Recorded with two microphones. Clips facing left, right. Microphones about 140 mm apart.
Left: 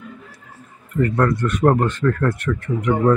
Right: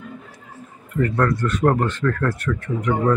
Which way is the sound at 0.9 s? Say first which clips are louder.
Left 2 dB; 10° left (ahead or behind).